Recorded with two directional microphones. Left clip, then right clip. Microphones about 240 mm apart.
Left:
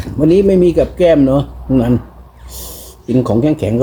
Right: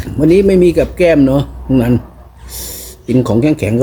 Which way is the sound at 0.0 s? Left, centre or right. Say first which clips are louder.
Right 1 dB; centre.